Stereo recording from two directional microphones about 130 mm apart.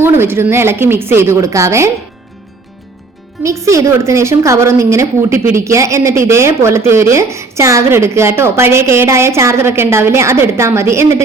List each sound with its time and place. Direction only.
0.0 s a woman's voice: 15° right (ahead or behind)
3.7 s a woman's voice: 25° right (ahead or behind)